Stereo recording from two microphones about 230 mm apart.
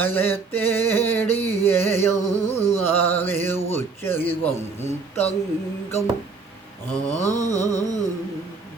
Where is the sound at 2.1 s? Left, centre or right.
Left.